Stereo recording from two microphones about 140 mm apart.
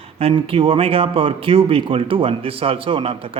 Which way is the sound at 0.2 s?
40° right (ahead or behind).